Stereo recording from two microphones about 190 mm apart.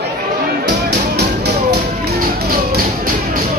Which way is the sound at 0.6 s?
60° right (ahead or behind).